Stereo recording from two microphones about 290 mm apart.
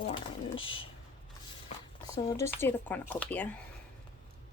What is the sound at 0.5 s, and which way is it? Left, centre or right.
Speech, left.